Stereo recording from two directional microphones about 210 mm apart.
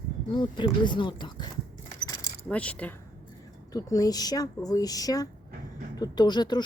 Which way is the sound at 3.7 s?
15° left (ahead or behind).